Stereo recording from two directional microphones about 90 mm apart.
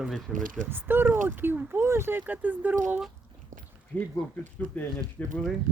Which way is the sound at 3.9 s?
20° left (ahead or behind).